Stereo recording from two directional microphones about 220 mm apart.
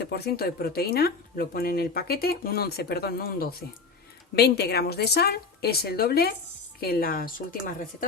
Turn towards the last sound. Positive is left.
turn(degrees=40)  # may be behind; listen again after turning